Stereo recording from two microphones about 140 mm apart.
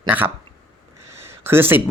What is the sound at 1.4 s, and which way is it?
Speech, 15° right (ahead or behind).